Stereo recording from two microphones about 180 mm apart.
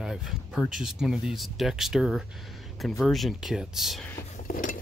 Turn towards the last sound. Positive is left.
turn(degrees=50)  # may be behind; listen again after turning